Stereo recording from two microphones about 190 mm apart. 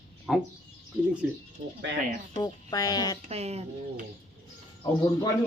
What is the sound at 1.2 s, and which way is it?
Speech, 10° right (ahead or behind).